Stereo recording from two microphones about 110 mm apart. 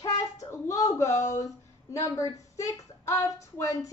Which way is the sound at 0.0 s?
30° left (ahead or behind).